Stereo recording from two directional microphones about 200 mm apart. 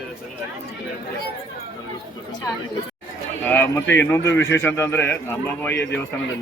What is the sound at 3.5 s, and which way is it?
Speech, 10° left (ahead or behind).